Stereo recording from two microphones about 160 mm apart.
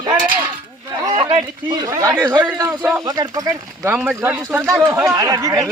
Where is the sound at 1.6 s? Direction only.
20° right (ahead or behind).